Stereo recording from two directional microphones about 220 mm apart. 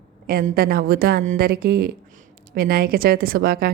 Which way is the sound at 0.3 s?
40° right (ahead or behind).